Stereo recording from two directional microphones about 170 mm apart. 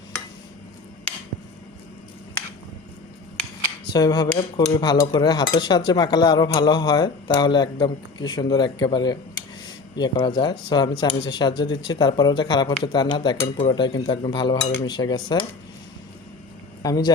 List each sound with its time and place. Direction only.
3.9 s cutlery: 25° left (ahead or behind)
16.8 s speech: 20° left (ahead or behind)